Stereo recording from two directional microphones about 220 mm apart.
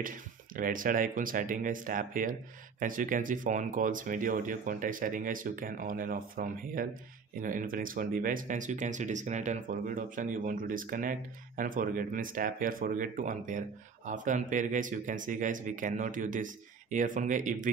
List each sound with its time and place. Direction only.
0.0 s speech: 40° right (ahead or behind)